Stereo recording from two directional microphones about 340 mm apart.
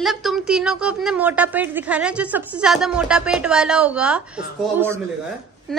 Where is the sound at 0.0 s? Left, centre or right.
Centre.